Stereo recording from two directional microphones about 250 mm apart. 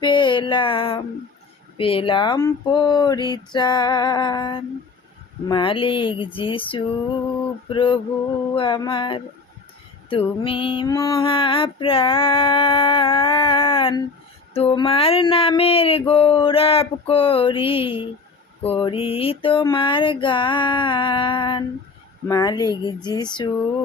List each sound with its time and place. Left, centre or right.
0.0 s a sound: centre
1.8 s speech: left
5.5 s mantra: centre
22.3 s speech: centre